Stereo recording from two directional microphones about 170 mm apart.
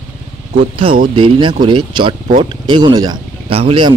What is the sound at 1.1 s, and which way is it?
Speech, 30° right (ahead or behind).